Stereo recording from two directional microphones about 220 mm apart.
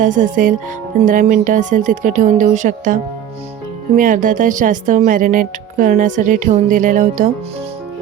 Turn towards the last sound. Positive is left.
turn(degrees=-35)  # may be behind; listen again after turning